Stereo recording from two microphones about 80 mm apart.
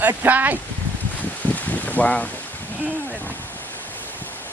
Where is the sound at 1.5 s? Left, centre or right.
Centre.